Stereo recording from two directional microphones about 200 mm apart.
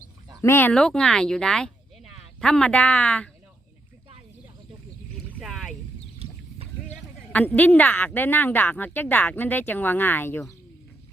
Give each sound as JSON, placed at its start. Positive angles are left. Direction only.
{"t": 0.4, "sound": "speech", "side_deg": 10}
{"t": 5.4, "sound": "boat", "side_deg": 0}
{"t": 7.3, "sound": "speech", "side_deg": 10}